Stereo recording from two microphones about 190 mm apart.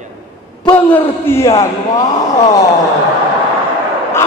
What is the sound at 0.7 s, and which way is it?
A man's voice, 10° left (ahead or behind).